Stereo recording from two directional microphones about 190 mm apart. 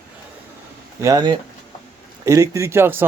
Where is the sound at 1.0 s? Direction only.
20° right (ahead or behind).